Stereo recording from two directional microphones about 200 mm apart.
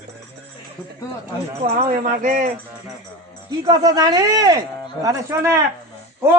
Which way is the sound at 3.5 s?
20° right (ahead or behind).